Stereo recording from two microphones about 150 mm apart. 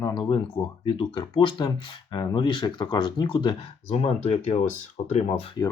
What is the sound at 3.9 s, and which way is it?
Speech, 45° left (ahead or behind).